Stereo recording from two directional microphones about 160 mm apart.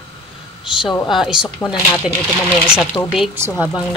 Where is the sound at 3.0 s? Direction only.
15° left (ahead or behind).